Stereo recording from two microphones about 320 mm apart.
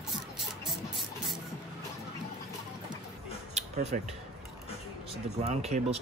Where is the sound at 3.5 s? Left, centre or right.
Centre.